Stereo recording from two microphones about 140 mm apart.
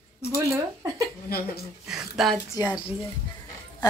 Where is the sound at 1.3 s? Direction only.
90° left.